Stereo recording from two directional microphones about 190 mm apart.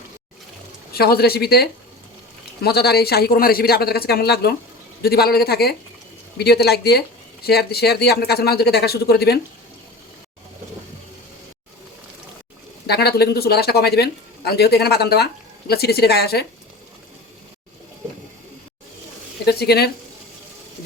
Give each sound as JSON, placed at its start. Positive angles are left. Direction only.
{"t": 0.9, "sound": "speech", "side_deg": 55}
{"t": 12.9, "sound": "speech", "side_deg": 60}
{"t": 19.5, "sound": "speech", "side_deg": 60}